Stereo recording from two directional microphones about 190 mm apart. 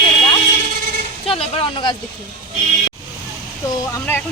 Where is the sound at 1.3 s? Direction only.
25° left (ahead or behind).